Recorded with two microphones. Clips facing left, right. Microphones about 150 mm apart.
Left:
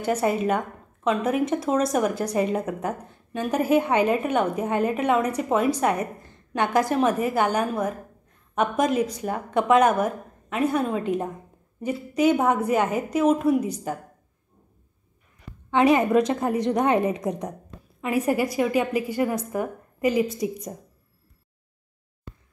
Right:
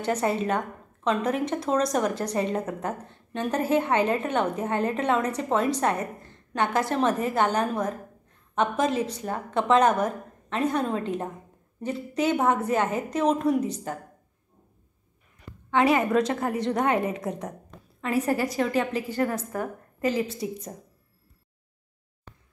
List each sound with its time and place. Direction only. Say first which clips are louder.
0.0 s a woman's voice: left 2 dB; 10° left (ahead or behind)
15.7 s a woman's voice: left 3 dB; 20° left (ahead or behind)